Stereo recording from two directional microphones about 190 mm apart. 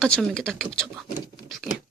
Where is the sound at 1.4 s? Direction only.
Centre (ahead or behind).